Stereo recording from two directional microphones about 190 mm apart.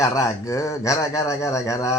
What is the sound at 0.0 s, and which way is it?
Speech, 15° left (ahead or behind).